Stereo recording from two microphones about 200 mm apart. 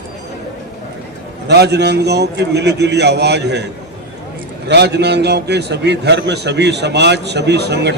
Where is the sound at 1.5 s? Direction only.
55° right (ahead or behind).